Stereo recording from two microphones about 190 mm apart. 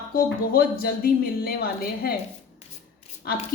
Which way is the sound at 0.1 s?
50° left (ahead or behind).